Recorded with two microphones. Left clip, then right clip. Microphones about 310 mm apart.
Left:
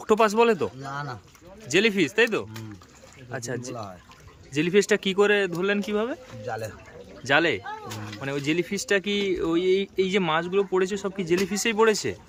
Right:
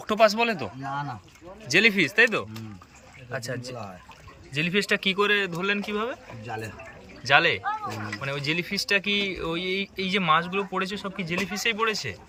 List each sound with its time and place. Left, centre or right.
0.0 s speech: centre
7.3 s speech: centre